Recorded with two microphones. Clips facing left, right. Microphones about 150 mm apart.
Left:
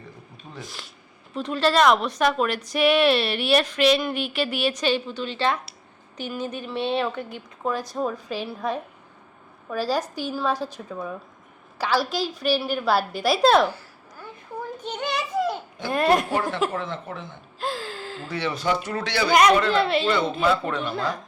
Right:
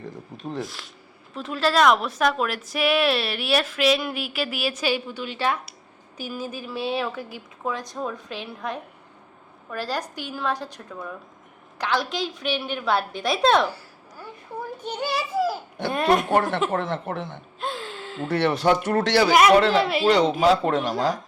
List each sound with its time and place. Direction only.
0.6 s a woman's voice: centre (ahead or behind)
14.8 s a sound: 10° right (ahead or behind)
15.9 s speech: centre (ahead or behind)
16.3 s speech: 55° right (ahead or behind)
17.6 s a sound: centre (ahead or behind)
18.3 s speech: 60° right (ahead or behind)
19.3 s speech: 5° right (ahead or behind)
20.4 s speech: 40° right (ahead or behind)